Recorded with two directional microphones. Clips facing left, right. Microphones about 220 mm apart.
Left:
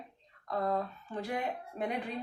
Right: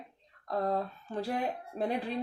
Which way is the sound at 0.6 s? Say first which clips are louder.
Right 1 dB; 35° right (ahead or behind).